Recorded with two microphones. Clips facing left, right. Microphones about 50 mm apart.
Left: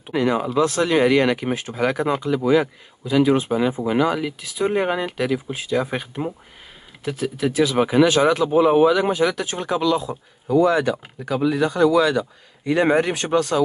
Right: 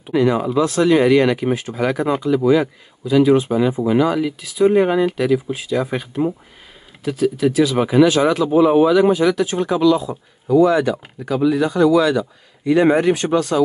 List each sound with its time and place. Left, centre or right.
0.0 s speech: left
3.1 s speech: left